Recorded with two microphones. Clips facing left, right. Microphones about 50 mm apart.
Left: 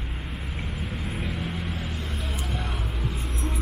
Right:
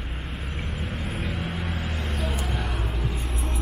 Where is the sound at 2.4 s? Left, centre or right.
Right.